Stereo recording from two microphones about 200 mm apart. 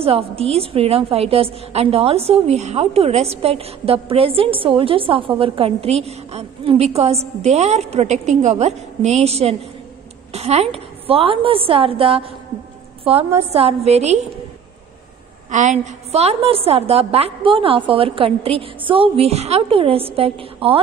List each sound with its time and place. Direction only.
0.0 s a woman's voice: 30° right (ahead or behind)
15.5 s a woman's voice: 35° right (ahead or behind)